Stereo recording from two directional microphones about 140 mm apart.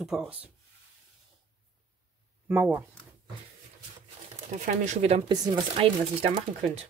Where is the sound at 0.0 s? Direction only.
5° right (ahead or behind).